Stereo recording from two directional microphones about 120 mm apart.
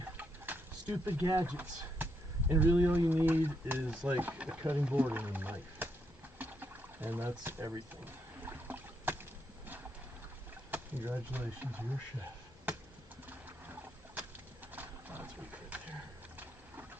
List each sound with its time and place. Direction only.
0.2 s a sound: 15° right (ahead or behind)
1.4 s speech: 15° right (ahead or behind)
6.4 s rowboat: 15° right (ahead or behind)
8.0 s boat: 15° right (ahead or behind)
10.7 s speech: 15° right (ahead or behind)
14.7 s a sound: 15° right (ahead or behind)